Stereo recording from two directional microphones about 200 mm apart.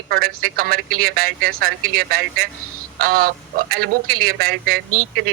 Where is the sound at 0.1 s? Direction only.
50° right (ahead or behind).